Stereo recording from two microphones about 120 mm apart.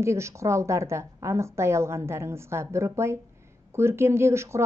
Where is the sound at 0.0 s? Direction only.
25° right (ahead or behind).